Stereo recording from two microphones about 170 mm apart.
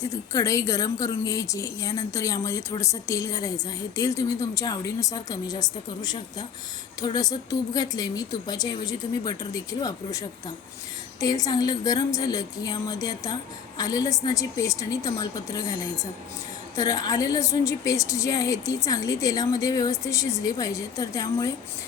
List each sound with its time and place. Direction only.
0.0 s a woman's voice: 20° left (ahead or behind)
16.7 s a woman's voice: 20° left (ahead or behind)